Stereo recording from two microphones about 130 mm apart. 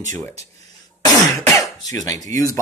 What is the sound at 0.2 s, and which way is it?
Speech, 20° left (ahead or behind).